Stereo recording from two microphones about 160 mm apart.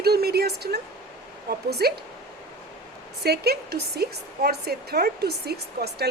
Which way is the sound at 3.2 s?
85° right.